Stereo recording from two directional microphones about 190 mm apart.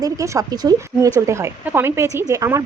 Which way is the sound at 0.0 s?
20° right (ahead or behind).